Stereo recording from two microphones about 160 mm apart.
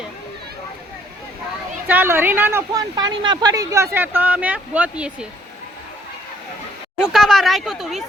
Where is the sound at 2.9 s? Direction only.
25° right (ahead or behind); by 5.2 s 5° right (ahead or behind).